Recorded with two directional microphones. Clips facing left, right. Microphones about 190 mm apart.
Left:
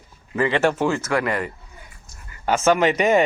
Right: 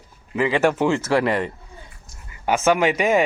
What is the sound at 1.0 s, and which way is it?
Speech, 30° right (ahead or behind).